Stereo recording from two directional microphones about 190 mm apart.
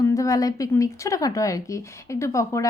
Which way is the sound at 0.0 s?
15° left (ahead or behind).